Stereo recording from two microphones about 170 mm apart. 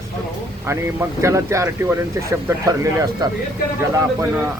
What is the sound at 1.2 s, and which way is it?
Speech, 15° right (ahead or behind).